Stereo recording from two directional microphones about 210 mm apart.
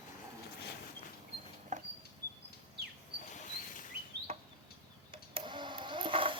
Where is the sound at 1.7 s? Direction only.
35° right (ahead or behind).